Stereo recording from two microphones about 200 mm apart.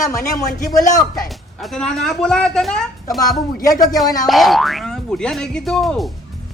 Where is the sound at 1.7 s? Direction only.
5° left (ahead or behind).